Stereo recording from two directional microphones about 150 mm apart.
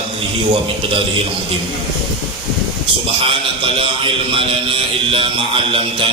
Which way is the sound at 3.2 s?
35° right (ahead or behind).